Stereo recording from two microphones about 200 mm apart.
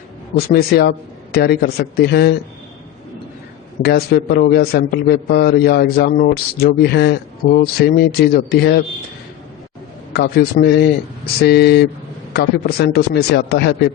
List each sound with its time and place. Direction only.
0.3 s a man's voice: 50° left (ahead or behind)
3.8 s a man's voice: 50° left (ahead or behind)
10.1 s a man's voice: 55° left (ahead or behind)